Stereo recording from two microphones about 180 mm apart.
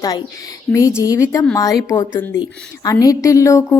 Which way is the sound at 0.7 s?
15° left (ahead or behind).